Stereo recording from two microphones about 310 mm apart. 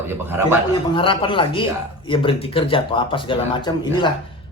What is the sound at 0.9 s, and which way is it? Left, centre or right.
Speech, centre.